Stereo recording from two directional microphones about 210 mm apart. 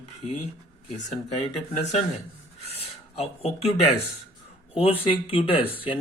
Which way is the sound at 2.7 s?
30° left (ahead or behind).